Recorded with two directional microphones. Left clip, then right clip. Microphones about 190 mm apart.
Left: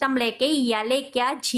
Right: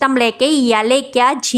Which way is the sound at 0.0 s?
35° right (ahead or behind).